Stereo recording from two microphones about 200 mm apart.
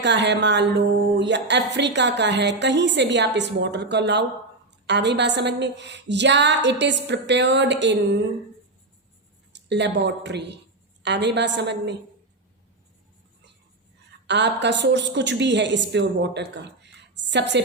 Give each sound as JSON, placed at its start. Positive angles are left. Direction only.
{"t": 0.0, "sound": "a woman's voice", "side_deg": -60}
{"t": 9.5, "sound": "a woman's voice", "side_deg": -60}
{"t": 14.3, "sound": "a woman's voice", "side_deg": -60}